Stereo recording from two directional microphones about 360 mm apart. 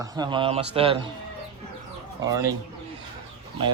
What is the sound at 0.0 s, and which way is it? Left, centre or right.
Speech, centre.